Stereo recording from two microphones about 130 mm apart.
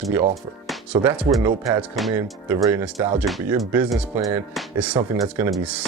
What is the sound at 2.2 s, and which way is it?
Speech, 15° right (ahead or behind).